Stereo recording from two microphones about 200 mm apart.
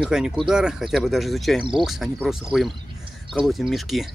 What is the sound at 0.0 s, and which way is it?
Speech, centre (ahead or behind).